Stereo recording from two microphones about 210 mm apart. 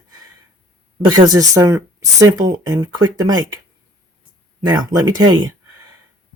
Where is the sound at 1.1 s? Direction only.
20° right (ahead or behind).